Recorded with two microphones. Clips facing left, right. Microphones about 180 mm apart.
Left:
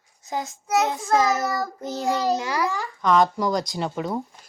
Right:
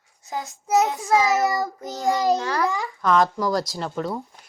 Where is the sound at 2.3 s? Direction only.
10° left (ahead or behind).